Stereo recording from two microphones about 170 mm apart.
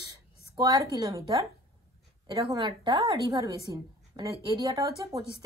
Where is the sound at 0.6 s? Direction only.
20° right (ahead or behind).